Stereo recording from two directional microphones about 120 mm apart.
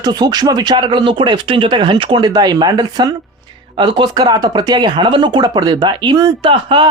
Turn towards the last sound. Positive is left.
turn(degrees=-45)  # may be behind; listen again after turning